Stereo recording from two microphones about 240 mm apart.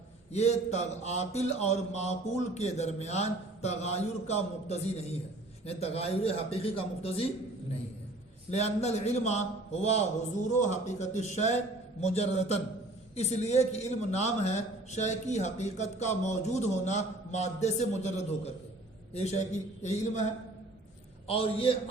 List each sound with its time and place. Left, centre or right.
0.3 s a man's voice: left
8.4 s a man's voice: left
21.2 s a man's voice: left